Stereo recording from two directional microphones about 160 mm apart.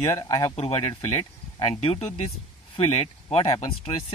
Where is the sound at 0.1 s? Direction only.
20° left (ahead or behind).